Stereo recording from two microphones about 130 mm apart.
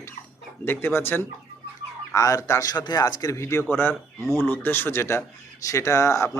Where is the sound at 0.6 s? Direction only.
15° left (ahead or behind).